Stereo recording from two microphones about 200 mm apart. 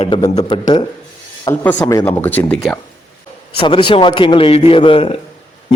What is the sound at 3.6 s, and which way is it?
A man's voice, 25° left (ahead or behind).